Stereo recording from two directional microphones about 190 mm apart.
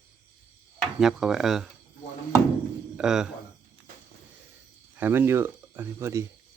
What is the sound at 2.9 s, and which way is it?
Speech, 5° right (ahead or behind).